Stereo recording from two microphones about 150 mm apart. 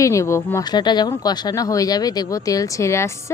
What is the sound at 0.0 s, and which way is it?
Speech, 20° left (ahead or behind).